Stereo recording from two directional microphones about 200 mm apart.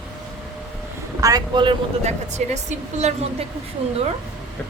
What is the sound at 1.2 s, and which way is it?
A woman's voice, 20° right (ahead or behind).